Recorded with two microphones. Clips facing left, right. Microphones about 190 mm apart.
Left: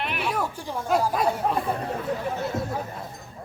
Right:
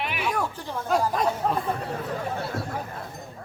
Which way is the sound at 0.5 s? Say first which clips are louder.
Left 1 dB; 10° left (ahead or behind).